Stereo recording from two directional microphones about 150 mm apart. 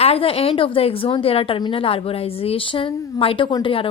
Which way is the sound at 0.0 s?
40° left (ahead or behind).